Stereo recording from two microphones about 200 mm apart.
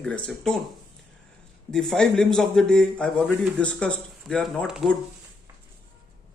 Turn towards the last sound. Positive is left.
turn(degrees=0)  # may be behind; listen again after turning